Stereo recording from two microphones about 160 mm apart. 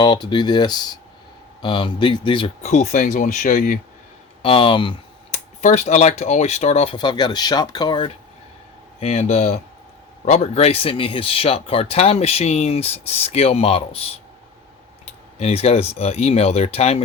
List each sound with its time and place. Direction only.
0.0 s speech: 30° left (ahead or behind)
2.6 s speech: 45° left (ahead or behind)
4.4 s speech: 35° left (ahead or behind)
5.6 s speech: 45° left (ahead or behind)
6.9 s speech: 30° left (ahead or behind)
9.0 s speech: 40° left (ahead or behind)
15.4 s speech: 40° left (ahead or behind)